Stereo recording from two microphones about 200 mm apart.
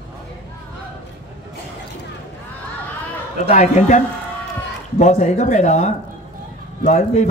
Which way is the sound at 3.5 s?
40° left (ahead or behind).